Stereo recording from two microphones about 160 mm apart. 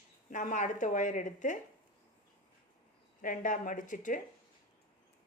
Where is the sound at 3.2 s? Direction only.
55° left (ahead or behind).